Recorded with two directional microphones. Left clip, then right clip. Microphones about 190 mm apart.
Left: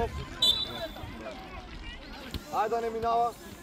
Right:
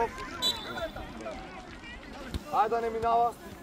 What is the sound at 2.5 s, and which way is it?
Speech, 50° left (ahead or behind).